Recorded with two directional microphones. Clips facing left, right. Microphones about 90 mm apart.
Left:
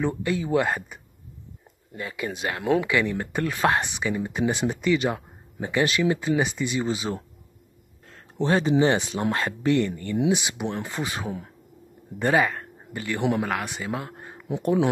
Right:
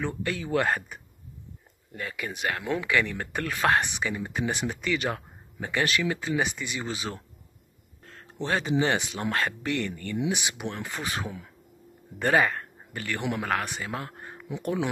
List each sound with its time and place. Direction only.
0.0 s speech: 20° left (ahead or behind)
2.0 s a man's voice: 20° left (ahead or behind)
4.4 s speech: 25° left (ahead or behind)
8.4 s a man's voice: 25° left (ahead or behind); by 14.3 s 10° left (ahead or behind)